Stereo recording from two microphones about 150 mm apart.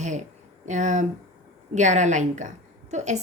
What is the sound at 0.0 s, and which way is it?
A woman's voice, 55° right (ahead or behind).